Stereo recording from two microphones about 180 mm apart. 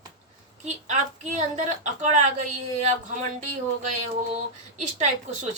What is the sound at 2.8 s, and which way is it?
Speech, 40° right (ahead or behind).